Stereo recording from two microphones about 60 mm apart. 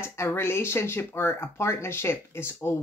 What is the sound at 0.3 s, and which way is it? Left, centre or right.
Speech, left.